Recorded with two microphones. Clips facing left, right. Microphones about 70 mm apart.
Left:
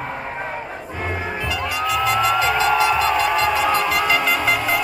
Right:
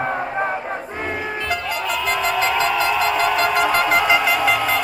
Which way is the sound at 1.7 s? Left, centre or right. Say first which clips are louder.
Left 5 dB; right.